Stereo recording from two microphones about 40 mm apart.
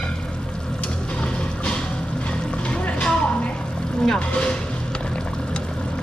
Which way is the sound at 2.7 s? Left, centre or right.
Left.